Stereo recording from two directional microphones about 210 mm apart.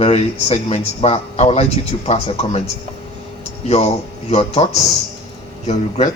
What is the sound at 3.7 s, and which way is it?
A man's voice, 30° left (ahead or behind).